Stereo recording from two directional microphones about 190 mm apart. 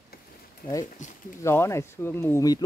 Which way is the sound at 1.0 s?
40° left (ahead or behind).